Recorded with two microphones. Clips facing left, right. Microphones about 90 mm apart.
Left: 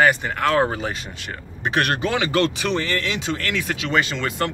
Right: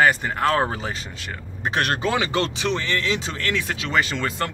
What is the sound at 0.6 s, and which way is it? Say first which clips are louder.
Speech: left 3 dB; 20° right (ahead or behind).